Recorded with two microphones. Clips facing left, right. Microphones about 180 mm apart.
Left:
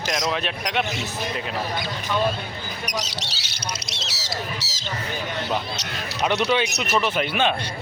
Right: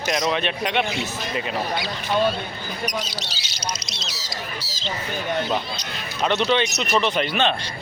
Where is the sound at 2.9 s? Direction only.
80° left.